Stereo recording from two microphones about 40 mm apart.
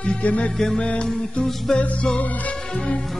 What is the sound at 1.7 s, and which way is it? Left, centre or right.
Music, left.